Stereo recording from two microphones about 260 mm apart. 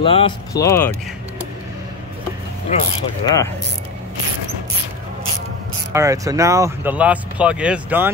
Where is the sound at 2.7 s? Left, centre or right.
Left.